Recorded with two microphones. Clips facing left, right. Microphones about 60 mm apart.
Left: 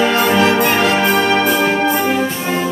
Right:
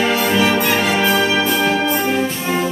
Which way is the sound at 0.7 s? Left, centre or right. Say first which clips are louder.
Left 2 dB; centre.